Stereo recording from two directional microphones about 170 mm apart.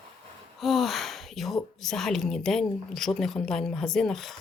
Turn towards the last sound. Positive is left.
turn(degrees=0)  # may be behind; listen again after turning